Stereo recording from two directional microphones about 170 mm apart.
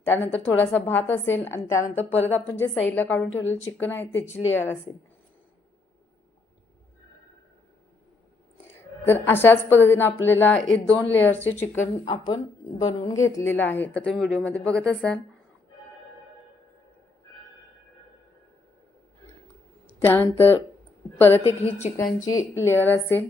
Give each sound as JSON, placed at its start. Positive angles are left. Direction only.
{"t": 0.0, "sound": "a woman's voice", "side_deg": 10}
{"t": 2.1, "sound": "a woman's voice", "side_deg": 40}
{"t": 2.5, "sound": "a woman's voice", "side_deg": 10}
{"t": 8.6, "sound": "a woman's voice", "side_deg": 15}
{"t": 11.9, "sound": "speech", "side_deg": 30}
{"t": 13.2, "sound": "a woman's voice", "side_deg": 15}
{"t": 19.9, "sound": "a woman's voice", "side_deg": 10}